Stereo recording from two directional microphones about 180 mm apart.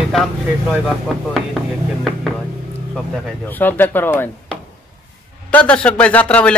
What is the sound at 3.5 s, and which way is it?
Speech, 10° left (ahead or behind).